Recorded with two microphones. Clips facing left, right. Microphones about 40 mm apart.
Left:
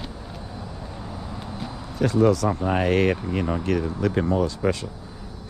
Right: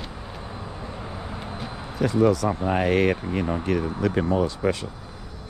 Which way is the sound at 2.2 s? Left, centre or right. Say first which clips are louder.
Left 1 dB; left.